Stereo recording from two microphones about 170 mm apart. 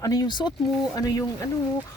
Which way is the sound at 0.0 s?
20° left (ahead or behind).